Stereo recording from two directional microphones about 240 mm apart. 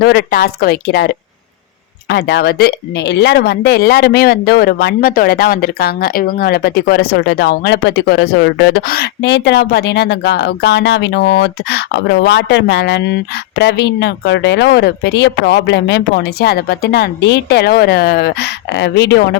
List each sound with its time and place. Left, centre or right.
0.0 s speech: left